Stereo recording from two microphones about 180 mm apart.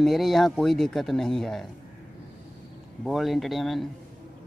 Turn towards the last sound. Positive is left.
turn(degrees=0)  # may be behind; listen again after turning